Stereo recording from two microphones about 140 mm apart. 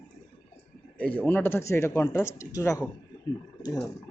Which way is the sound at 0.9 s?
10° left (ahead or behind).